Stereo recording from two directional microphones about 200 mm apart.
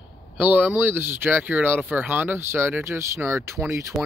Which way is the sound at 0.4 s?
10° right (ahead or behind).